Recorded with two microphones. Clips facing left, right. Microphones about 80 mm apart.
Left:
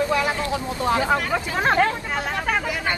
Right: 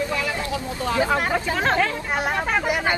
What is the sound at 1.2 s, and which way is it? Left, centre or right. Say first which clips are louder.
Speech: right 2 dB; right.